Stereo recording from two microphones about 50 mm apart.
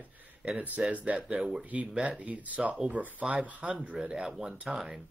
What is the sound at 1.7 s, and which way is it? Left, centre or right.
Speech, right.